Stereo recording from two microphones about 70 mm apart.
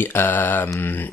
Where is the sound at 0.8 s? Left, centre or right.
Left.